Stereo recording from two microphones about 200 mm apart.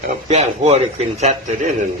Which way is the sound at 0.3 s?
35° right (ahead or behind).